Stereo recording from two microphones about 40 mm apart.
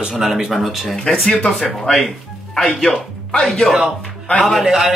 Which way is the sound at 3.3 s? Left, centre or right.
Centre.